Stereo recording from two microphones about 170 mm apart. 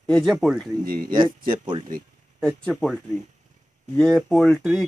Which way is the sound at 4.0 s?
5° left (ahead or behind).